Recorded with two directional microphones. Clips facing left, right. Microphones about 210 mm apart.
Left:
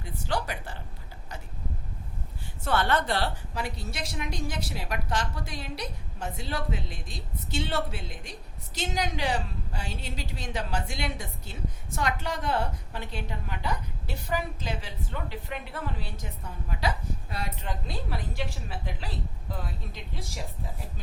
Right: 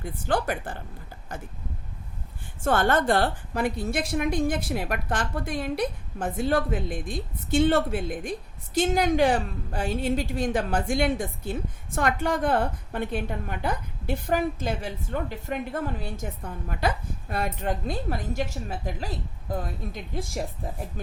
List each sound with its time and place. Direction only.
0.0 s a woman's voice: 50° right (ahead or behind)
2.6 s a woman's voice: 45° right (ahead or behind)